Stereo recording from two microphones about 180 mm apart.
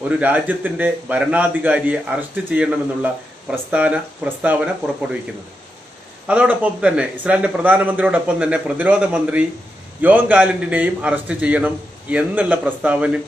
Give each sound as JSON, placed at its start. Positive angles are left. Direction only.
{"t": 0.1, "sound": "a man's voice", "side_deg": -10}
{"t": 6.2, "sound": "a man's voice", "side_deg": -5}